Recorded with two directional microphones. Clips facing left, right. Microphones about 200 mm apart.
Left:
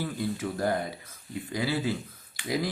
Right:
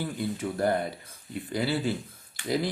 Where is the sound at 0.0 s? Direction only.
30° right (ahead or behind).